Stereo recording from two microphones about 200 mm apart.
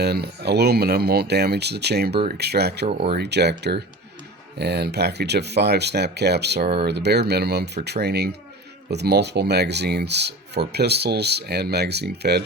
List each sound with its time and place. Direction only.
0.0 s speech: 55° right (ahead or behind)